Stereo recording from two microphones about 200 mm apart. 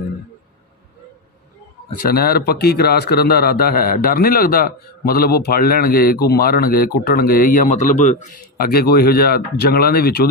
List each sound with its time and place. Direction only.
2.0 s a man's voice: 50° left (ahead or behind)